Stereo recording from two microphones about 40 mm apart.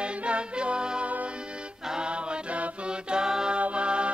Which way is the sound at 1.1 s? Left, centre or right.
Right.